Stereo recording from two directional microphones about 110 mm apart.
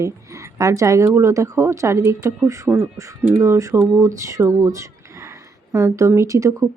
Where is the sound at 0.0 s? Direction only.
25° right (ahead or behind).